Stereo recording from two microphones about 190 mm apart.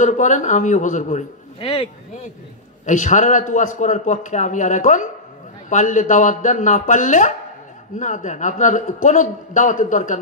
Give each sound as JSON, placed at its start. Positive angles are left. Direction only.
{"t": 0.0, "sound": "a man's voice", "side_deg": 40}
{"t": 2.8, "sound": "a man's voice", "side_deg": 40}